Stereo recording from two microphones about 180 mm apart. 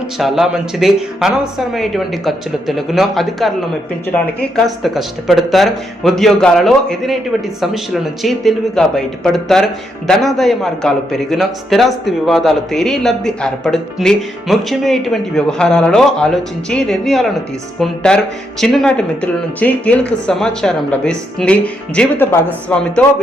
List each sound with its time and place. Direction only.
0.2 s a man's voice: centre (ahead or behind)
4.5 s a man's voice: centre (ahead or behind)
8.2 s a man's voice: centre (ahead or behind)